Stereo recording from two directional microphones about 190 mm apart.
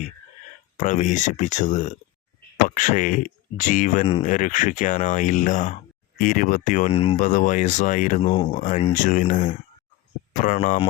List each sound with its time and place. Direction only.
0.8 s speech: 40° left (ahead or behind)
8.3 s speech: 25° left (ahead or behind)
8.6 s speech: 40° left (ahead or behind)